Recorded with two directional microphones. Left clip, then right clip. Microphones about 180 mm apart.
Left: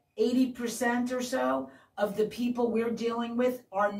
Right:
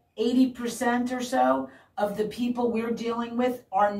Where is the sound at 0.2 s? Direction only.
Centre (ahead or behind).